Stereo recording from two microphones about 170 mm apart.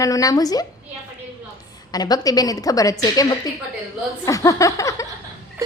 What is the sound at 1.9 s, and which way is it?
A woman's voice, 25° left (ahead or behind).